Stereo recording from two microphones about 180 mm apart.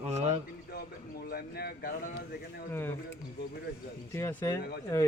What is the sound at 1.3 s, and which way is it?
Speech, 60° left (ahead or behind).